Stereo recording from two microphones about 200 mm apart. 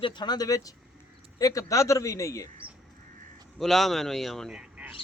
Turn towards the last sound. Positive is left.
turn(degrees=-5)  # may be behind; listen again after turning